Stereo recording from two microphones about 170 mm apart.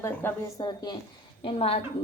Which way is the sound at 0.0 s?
10° left (ahead or behind).